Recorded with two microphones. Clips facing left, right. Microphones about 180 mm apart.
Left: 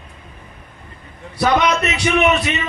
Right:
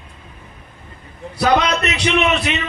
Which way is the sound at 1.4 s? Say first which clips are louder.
Even; 65° right (ahead or behind).